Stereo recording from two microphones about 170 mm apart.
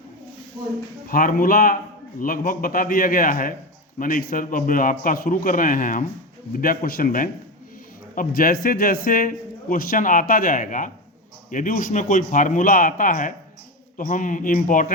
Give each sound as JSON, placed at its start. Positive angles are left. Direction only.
{"t": 1.0, "sound": "a man's voice", "side_deg": 55}